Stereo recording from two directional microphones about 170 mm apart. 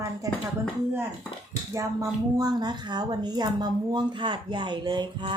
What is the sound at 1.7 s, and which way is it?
Speech, 20° right (ahead or behind).